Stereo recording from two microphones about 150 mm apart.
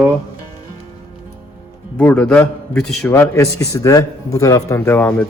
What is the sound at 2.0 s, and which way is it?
A man's voice, 5° left (ahead or behind).